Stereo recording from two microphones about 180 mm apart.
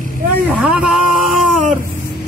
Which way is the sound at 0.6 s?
5° right (ahead or behind).